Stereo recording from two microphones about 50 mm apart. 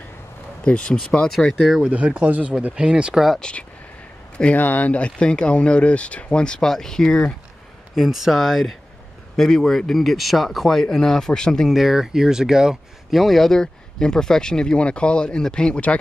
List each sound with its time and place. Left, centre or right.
0.7 s speech: left
1.8 s speech: right
2.7 s speech: centre
3.3 s speech: centre
4.6 s speech: left; by 7.3 s centre
7.9 s speech: centre
9.4 s speech: centre
11.7 s speech: centre
13.1 s speech: centre; by 16.0 s left